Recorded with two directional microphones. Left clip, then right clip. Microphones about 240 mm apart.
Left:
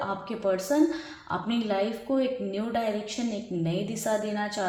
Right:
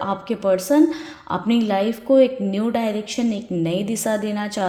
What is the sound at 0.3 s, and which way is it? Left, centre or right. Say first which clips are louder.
A woman's voice: right 9 dB; right.